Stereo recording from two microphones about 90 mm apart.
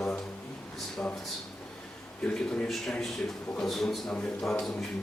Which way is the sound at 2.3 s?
10° left (ahead or behind).